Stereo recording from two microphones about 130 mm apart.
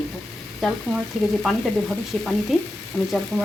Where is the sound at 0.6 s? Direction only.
Centre (ahead or behind).